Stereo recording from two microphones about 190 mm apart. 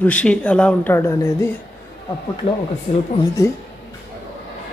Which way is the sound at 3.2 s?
15° left (ahead or behind).